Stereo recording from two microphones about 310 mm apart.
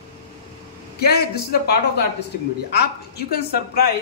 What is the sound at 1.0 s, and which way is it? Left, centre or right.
A woman's voice, left.